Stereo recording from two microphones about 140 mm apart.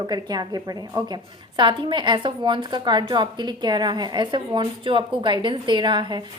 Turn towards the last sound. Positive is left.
turn(degrees=-35)  # may be behind; listen again after turning